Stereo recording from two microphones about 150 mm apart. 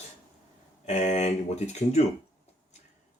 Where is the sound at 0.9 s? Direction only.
50° left (ahead or behind).